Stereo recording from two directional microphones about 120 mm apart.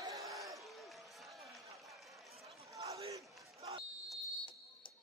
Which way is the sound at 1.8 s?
Centre (ahead or behind).